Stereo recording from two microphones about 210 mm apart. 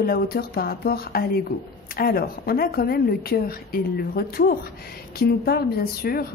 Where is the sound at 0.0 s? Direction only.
45° left (ahead or behind).